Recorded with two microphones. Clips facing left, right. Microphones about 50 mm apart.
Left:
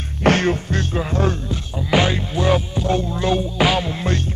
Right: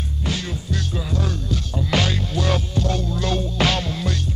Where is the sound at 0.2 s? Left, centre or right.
Left.